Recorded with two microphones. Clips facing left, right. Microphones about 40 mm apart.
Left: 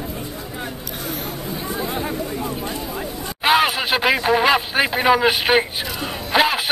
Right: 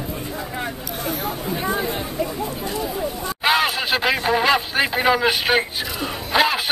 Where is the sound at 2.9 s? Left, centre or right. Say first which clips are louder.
Right 2 dB; centre.